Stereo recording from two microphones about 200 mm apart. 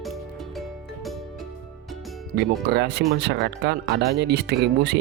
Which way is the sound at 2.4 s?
55° right (ahead or behind).